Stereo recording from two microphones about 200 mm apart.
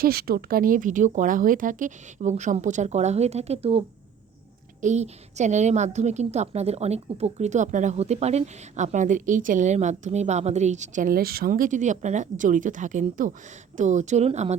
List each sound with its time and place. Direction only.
0.0 s a woman's voice: 50° right (ahead or behind); by 14.5 s 30° right (ahead or behind)